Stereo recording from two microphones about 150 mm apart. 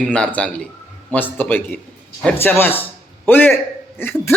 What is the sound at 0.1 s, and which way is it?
Speech, 10° left (ahead or behind).